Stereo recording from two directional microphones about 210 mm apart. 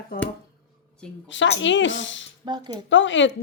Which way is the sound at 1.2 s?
60° left (ahead or behind).